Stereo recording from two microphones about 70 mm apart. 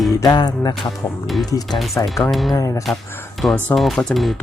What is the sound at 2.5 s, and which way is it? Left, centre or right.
Speech, left.